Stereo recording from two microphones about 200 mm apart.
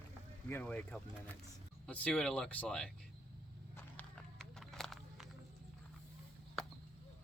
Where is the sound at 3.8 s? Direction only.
5° left (ahead or behind).